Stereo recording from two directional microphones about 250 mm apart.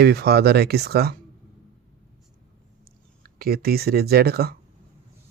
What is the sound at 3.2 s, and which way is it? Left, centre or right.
Speech, right.